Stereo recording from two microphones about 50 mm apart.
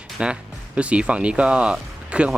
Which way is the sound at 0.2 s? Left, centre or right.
Right.